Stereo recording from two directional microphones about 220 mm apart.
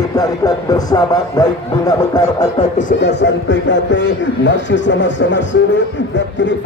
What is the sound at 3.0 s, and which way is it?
Speech, 50° left (ahead or behind).